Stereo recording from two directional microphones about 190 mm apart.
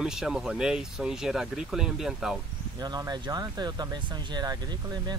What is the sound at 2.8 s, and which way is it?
Speech, 20° right (ahead or behind).